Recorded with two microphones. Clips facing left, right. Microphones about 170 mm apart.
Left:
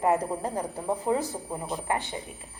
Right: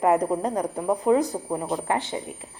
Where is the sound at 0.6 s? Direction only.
70° right (ahead or behind).